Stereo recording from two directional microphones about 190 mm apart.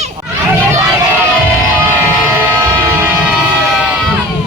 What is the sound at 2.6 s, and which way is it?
Train, 15° right (ahead or behind).